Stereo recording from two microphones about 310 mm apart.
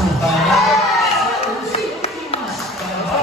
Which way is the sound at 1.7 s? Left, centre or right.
Centre.